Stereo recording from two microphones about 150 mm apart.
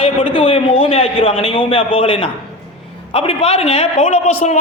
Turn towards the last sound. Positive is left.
turn(degrees=45)  # may be behind; listen again after turning